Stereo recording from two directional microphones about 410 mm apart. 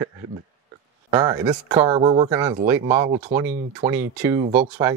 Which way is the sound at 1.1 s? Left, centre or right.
Centre.